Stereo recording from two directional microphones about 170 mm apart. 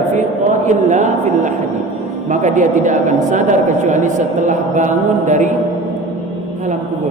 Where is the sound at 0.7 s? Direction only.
45° right (ahead or behind).